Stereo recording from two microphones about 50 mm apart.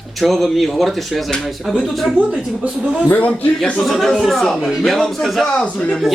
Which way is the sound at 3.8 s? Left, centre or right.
Centre.